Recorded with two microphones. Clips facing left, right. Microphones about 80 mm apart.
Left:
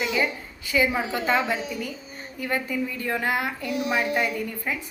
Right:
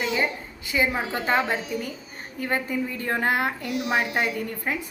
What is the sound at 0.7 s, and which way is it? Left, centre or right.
A woman's voice, right.